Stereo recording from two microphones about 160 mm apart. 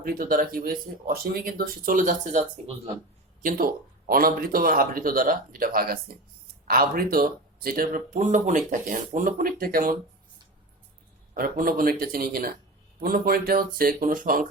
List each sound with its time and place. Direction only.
0.0 s speech: 65° right (ahead or behind); by 2.9 s 45° right (ahead or behind)
3.4 s speech: 65° right (ahead or behind)
11.3 s speech: 60° right (ahead or behind)